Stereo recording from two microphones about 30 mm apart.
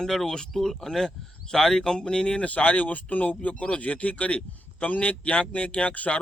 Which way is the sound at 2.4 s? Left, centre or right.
Left.